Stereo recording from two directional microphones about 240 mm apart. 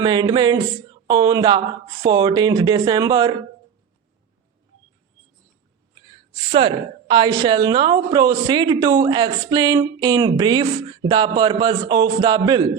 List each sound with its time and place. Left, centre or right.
0.0 s a sound: centre
1.0 s a woman's voice: centre
6.5 s a woman's voice: right